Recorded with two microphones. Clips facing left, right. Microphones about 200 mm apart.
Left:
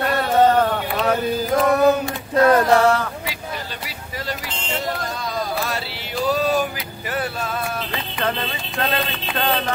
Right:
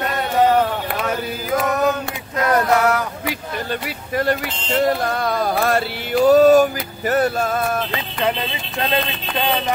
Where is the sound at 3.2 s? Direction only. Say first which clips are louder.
Right 4 dB; 55° right (ahead or behind).